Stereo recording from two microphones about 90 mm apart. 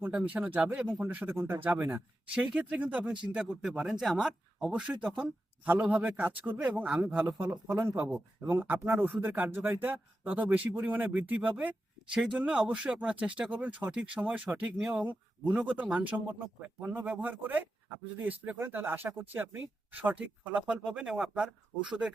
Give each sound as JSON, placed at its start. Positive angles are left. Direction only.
{"t": 0.3, "sound": "speech", "side_deg": -15}
{"t": 4.7, "sound": "speech", "side_deg": -15}
{"t": 8.0, "sound": "speech", "side_deg": -10}
{"t": 8.4, "sound": "speech", "side_deg": -25}